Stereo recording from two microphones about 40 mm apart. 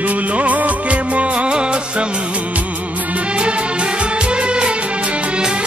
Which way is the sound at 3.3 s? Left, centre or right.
Right.